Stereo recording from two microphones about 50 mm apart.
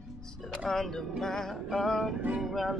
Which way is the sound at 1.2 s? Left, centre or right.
Centre.